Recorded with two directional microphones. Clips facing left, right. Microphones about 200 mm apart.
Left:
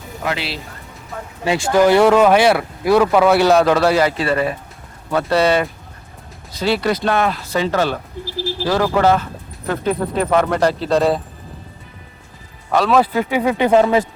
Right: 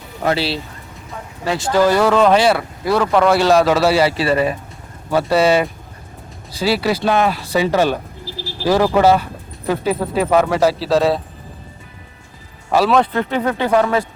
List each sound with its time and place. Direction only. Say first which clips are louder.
0.3 s speech: right 5 dB; 30° right (ahead or behind)
1.5 s speech: left 2 dB; 20° left (ahead or behind)
2.0 s a man's voice: left 1 dB; 5° left (ahead or behind)
12.7 s a man's voice: even; centre (ahead or behind)
13.7 s speech: left 3 dB; 20° left (ahead or behind)